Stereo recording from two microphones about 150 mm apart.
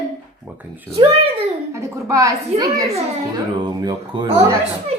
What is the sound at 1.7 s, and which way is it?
A woman's voice, 20° right (ahead or behind).